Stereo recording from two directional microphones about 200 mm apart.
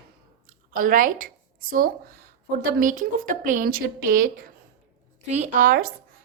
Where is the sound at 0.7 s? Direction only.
45° right (ahead or behind).